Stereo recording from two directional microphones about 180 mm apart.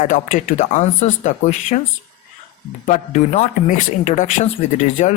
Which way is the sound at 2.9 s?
40° left (ahead or behind).